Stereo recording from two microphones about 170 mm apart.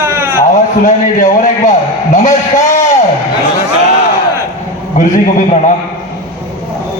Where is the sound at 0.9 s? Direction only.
45° left (ahead or behind).